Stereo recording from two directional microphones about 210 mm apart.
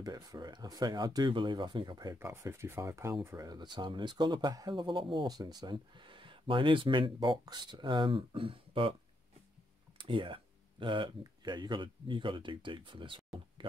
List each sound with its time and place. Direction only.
0.0 s speech: 15° right (ahead or behind)
9.9 s speech: 25° right (ahead or behind)